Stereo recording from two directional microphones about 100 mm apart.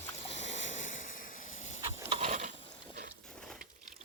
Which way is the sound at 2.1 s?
90° right.